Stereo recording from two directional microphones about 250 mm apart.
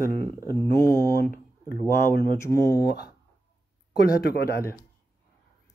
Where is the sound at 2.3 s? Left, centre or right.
Centre.